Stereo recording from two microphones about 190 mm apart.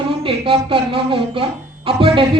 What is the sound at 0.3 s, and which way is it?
A woman's voice, 30° right (ahead or behind).